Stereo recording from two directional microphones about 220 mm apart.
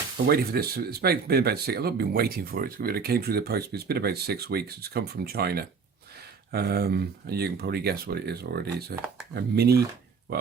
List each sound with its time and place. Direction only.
0.3 s speech: 45° right (ahead or behind)